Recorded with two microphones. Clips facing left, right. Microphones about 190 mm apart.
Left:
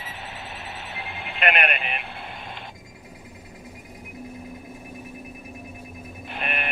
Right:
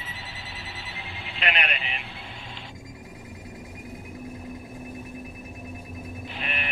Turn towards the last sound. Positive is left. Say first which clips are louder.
# left 4 dB
turn(degrees=55)  # may be behind; listen again after turning